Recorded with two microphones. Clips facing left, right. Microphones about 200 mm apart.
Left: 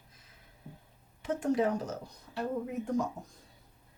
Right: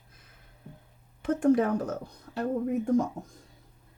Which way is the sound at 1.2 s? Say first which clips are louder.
Right 6 dB; 55° right (ahead or behind).